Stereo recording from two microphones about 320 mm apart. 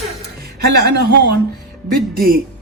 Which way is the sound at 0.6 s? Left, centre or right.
Right.